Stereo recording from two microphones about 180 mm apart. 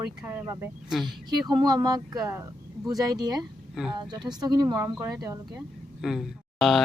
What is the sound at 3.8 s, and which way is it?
Speech, centre (ahead or behind).